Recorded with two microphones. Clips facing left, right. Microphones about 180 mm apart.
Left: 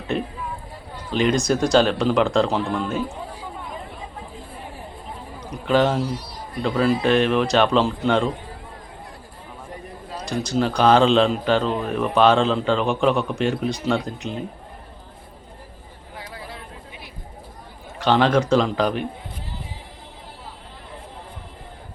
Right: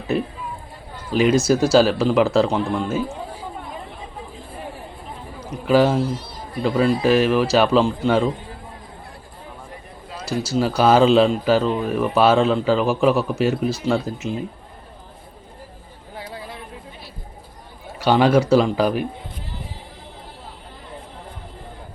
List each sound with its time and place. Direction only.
0.1 s speech: 5° right (ahead or behind)
5.5 s speech: 5° right (ahead or behind)
10.2 s speech: 5° right (ahead or behind)
16.1 s a sound: 25° right (ahead or behind)
18.0 s a man's voice: 10° right (ahead or behind)